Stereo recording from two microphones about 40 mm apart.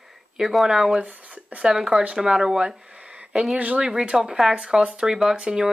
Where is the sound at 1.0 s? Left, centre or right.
Right.